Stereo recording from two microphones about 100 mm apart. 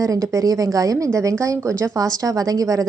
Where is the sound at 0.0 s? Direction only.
35° right (ahead or behind).